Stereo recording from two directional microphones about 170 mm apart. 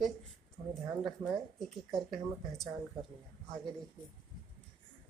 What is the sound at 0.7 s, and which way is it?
Speech, centre (ahead or behind).